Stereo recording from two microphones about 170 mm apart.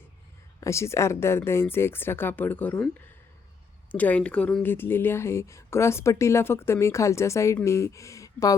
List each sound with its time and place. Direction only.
0.6 s speech: 15° left (ahead or behind)
3.9 s speech: 10° left (ahead or behind)